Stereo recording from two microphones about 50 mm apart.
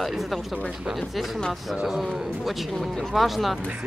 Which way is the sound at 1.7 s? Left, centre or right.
Centre.